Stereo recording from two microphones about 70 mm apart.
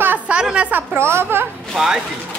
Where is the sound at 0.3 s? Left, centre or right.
Centre.